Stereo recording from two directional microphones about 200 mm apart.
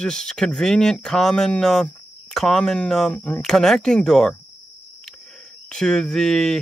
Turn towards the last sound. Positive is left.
turn(degrees=5)  # may be behind; listen again after turning